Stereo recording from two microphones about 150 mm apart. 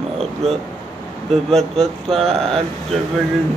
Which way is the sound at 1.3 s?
Centre (ahead or behind).